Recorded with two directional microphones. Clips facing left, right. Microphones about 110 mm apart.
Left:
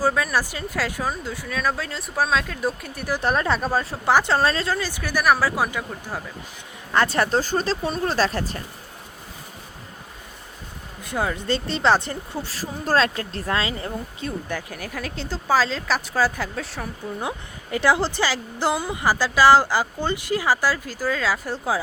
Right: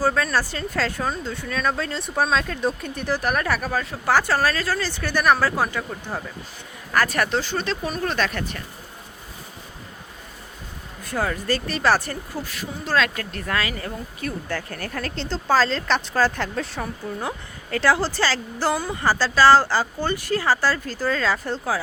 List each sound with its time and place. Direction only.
0.0 s speech: 10° left (ahead or behind)
3.2 s speech: 25° left (ahead or behind); by 5.8 s 10° left (ahead or behind)
6.9 s speech: 25° left (ahead or behind)
11.0 s speech: 15° left (ahead or behind)
17.2 s speech: 15° left (ahead or behind)